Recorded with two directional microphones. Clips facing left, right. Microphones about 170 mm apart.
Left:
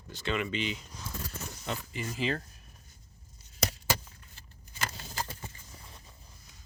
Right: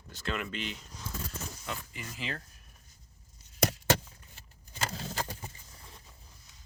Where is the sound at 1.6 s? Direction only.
30° left (ahead or behind).